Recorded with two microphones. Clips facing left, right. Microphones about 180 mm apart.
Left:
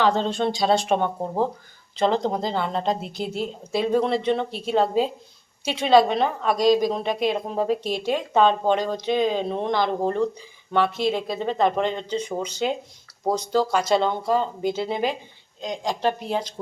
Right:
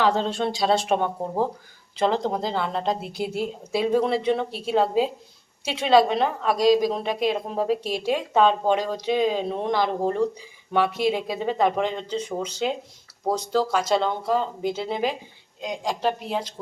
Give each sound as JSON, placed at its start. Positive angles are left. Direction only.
{"t": 0.0, "sound": "a woman's voice", "side_deg": -5}